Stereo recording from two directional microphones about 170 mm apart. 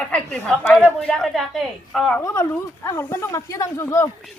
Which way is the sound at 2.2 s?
15° left (ahead or behind).